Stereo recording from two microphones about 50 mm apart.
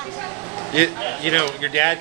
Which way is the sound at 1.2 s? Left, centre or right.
Left.